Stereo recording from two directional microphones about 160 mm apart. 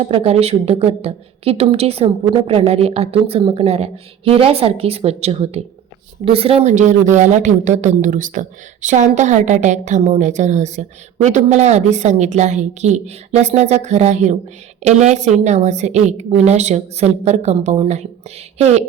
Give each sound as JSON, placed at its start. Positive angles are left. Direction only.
{"t": 0.0, "sound": "a woman's voice", "side_deg": -40}